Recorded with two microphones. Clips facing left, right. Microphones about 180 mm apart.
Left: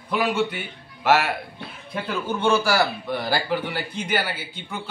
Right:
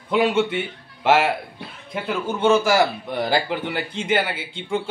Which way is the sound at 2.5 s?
20° right (ahead or behind).